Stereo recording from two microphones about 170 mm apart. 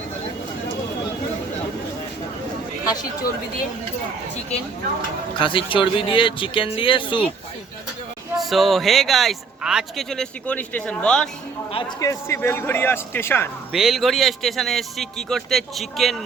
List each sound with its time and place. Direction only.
5.4 s a man's voice: 30° left (ahead or behind)
8.4 s a man's voice: centre (ahead or behind)
11.9 s speech: 20° left (ahead or behind)
13.7 s a man's voice: centre (ahead or behind)